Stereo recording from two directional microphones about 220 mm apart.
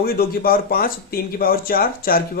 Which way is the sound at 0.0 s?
45° left (ahead or behind).